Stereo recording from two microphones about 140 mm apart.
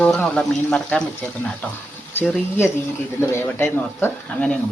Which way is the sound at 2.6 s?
20° left (ahead or behind).